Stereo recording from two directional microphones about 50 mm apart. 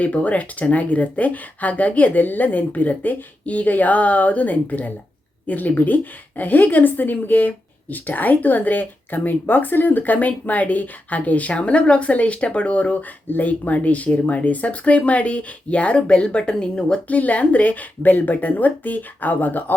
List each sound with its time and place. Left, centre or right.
0.0 s a woman's voice: left
17.1 s a woman's voice: left